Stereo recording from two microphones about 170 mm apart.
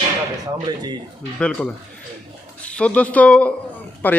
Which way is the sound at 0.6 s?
25° right (ahead or behind).